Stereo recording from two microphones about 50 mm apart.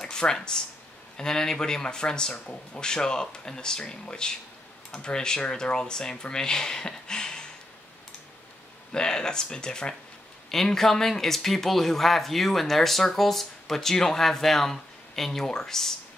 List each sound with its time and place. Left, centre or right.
0.0 s speech: centre
8.9 s speech: centre